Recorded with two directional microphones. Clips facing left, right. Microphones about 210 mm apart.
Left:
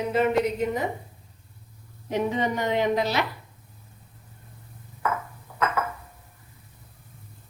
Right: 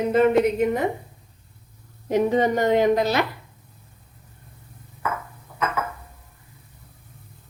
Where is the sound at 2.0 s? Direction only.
45° right (ahead or behind).